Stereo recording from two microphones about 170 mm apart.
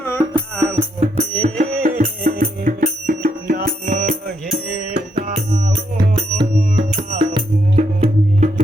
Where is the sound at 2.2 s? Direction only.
55° right (ahead or behind).